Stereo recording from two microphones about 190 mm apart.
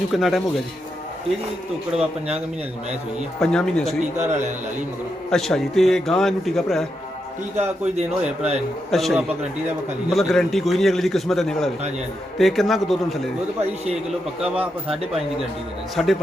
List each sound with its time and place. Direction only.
0.1 s a man's voice: centre (ahead or behind)
1.9 s a man's voice: 35° right (ahead or behind)
3.4 s a man's voice: 5° left (ahead or behind)
4.3 s a man's voice: 40° right (ahead or behind)
5.3 s a man's voice: centre (ahead or behind)
7.5 s a man's voice: 35° right (ahead or behind)
8.9 s a man's voice: centre (ahead or behind)
16.0 s a man's voice: centre (ahead or behind)